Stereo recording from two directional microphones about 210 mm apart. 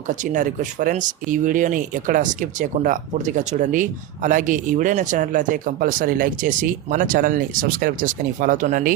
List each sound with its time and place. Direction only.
0.1 s speech: 35° right (ahead or behind)